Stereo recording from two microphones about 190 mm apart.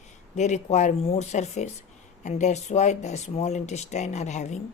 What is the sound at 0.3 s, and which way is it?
Speech, 35° left (ahead or behind).